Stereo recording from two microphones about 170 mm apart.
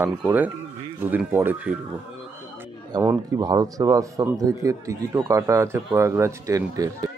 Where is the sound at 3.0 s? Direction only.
15° right (ahead or behind).